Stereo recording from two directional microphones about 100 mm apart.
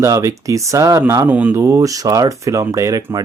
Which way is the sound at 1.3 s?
15° right (ahead or behind).